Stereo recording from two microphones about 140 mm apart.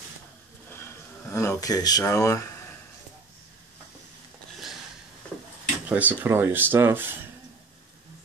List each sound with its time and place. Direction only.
0.7 s speech: 15° left (ahead or behind)
5.9 s speech: 10° right (ahead or behind)